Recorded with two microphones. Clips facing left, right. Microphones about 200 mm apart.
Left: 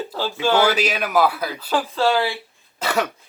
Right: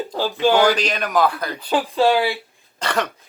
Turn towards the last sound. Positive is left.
turn(degrees=5)  # may be behind; listen again after turning